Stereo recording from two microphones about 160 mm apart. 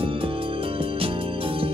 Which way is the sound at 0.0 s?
35° right (ahead or behind).